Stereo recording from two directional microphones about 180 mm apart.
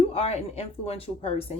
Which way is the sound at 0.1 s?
35° left (ahead or behind).